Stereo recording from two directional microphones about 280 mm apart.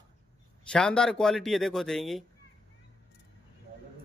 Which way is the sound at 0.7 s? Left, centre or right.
Centre.